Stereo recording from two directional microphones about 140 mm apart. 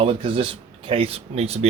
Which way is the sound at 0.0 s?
40° right (ahead or behind).